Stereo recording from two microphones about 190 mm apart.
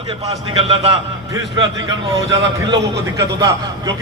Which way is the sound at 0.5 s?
30° right (ahead or behind).